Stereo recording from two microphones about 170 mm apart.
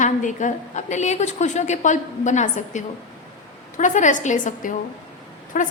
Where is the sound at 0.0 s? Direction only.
45° left (ahead or behind).